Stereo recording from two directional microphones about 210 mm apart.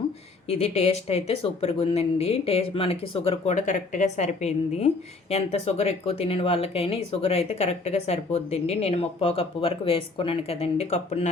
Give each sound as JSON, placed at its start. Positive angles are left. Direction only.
{"t": 0.4, "sound": "speech", "side_deg": 30}